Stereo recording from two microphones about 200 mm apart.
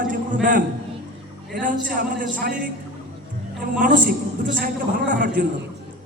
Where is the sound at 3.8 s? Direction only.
45° right (ahead or behind).